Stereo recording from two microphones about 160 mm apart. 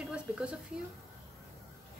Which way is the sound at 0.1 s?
5° right (ahead or behind).